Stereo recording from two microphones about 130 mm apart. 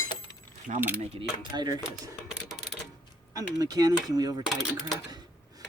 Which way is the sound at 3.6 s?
30° right (ahead or behind).